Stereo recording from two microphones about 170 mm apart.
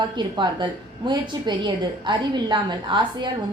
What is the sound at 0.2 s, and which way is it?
A woman's voice, 25° right (ahead or behind).